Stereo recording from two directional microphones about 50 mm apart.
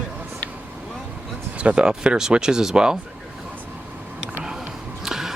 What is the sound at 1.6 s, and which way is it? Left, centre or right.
Speech, right.